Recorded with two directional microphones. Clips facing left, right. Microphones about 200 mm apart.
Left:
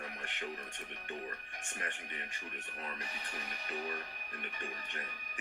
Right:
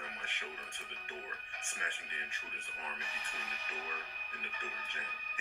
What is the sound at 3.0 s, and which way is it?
Speech, 35° left (ahead or behind).